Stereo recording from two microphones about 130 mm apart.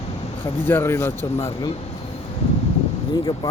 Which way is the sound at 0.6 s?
20° left (ahead or behind).